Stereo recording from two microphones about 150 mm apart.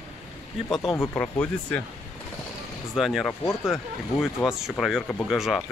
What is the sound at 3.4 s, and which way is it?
Speech, 20° left (ahead or behind).